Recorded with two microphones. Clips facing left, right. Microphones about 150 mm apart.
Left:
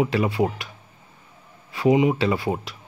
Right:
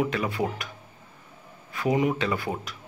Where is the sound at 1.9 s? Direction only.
15° left (ahead or behind).